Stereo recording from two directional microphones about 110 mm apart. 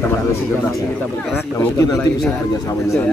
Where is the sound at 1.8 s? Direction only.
35° left (ahead or behind).